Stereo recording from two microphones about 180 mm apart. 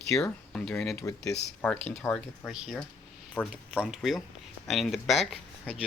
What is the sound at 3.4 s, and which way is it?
Speech, 5° left (ahead or behind).